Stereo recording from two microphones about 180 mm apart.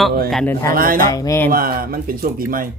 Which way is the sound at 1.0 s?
20° left (ahead or behind).